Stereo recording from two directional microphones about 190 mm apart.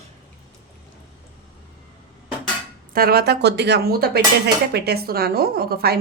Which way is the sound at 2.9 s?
50° right (ahead or behind).